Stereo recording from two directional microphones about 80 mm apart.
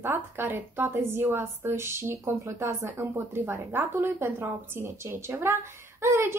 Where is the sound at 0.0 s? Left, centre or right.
Right.